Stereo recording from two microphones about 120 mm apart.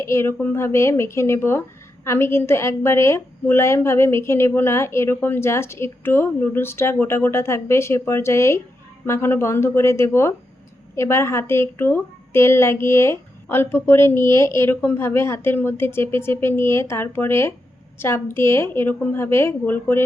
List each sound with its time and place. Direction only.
0.0 s a woman's voice: 20° left (ahead or behind)